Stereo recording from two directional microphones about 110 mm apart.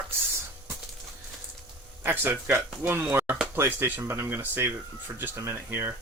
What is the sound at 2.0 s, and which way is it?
Speech, 20° right (ahead or behind).